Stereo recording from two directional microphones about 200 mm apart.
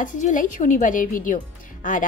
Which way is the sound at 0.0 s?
40° left (ahead or behind).